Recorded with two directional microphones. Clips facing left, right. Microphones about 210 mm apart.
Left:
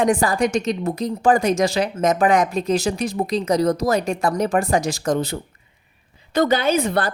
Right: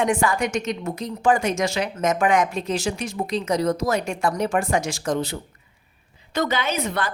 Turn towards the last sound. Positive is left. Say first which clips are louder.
# left 6 dB
turn(degrees=35)  # may be behind; listen again after turning